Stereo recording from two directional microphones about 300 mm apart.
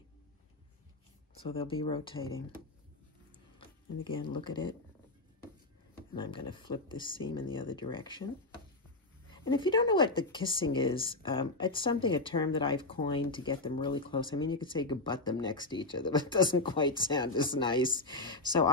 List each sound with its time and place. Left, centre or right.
1.4 s speech: centre
3.5 s speech: centre
6.1 s speech: centre
9.3 s speech: centre